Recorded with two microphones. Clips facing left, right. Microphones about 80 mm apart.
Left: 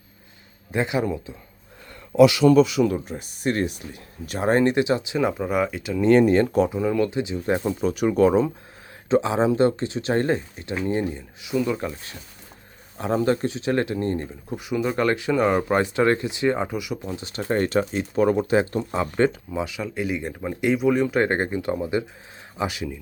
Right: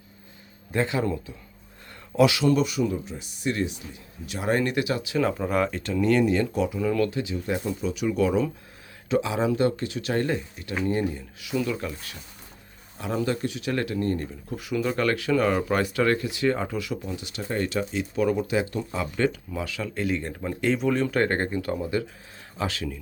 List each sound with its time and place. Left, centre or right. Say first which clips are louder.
0.7 s speech: left 2 dB; centre
2.6 s speech: left 5 dB; left
4.3 s speech: left 5 dB; left
5.4 s speech: left 1 dB; centre
6.0 s speech: left 5 dB; left
6.7 s speech: left 2 dB; left
7.4 s speech: left 7 dB; left; by 17.0 s centre
17.0 s speech: left 3 dB; left
19.6 s speech: right 1 dB; centre